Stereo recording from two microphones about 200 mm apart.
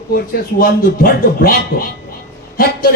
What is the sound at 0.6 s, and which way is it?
Speech, 45° left (ahead or behind).